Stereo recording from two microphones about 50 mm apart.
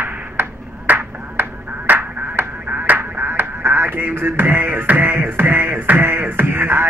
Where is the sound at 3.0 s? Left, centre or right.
Right.